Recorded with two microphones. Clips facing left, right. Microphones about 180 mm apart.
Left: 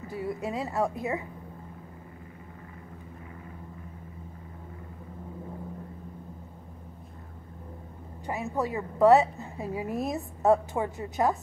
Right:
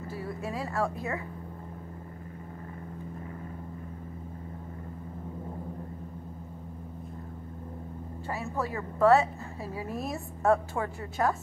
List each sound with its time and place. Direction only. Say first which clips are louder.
0.1 s a woman's voice: left 4 dB; 20° left (ahead or behind)
8.3 s a woman's voice: left 3 dB; 20° left (ahead or behind)